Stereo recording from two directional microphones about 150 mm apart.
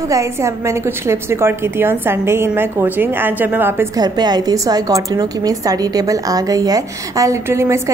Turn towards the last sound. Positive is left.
turn(degrees=-20)  # may be behind; listen again after turning